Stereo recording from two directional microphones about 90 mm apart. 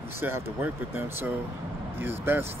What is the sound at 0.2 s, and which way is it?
Speech, 25° right (ahead or behind).